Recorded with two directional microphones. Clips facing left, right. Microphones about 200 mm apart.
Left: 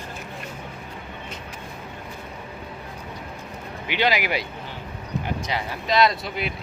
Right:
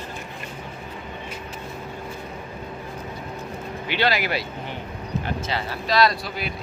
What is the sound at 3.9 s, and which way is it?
Speech, 15° left (ahead or behind).